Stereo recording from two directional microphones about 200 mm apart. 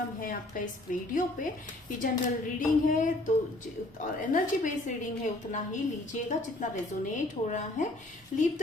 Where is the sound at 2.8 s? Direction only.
40° left (ahead or behind).